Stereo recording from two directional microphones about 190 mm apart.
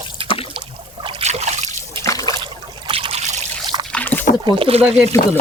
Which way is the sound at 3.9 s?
10° left (ahead or behind).